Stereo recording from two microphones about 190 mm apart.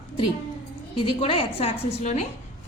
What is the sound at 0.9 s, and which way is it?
A woman's voice, 30° left (ahead or behind).